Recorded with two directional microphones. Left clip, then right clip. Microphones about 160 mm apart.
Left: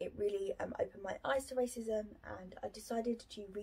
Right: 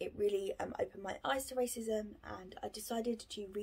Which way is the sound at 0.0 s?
20° right (ahead or behind).